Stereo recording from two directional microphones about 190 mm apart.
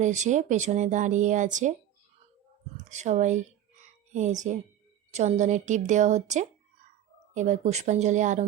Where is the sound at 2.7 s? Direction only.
40° right (ahead or behind).